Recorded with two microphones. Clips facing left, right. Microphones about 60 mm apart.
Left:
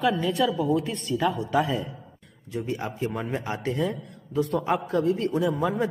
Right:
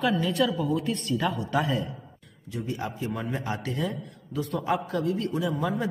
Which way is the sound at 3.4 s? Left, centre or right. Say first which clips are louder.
Left 2 dB; left.